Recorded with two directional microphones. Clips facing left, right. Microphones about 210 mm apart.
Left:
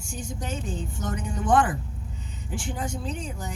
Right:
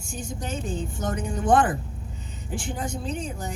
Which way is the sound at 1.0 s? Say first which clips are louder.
Right 2 dB; 50° right (ahead or behind).